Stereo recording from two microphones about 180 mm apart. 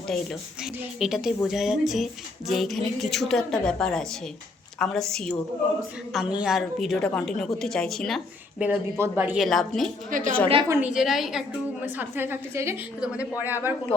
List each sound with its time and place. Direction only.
0.1 s a woman's voice: centre (ahead or behind)
10.1 s a woman's voice: 45° right (ahead or behind)
10.7 s a woman's voice: 10° right (ahead or behind)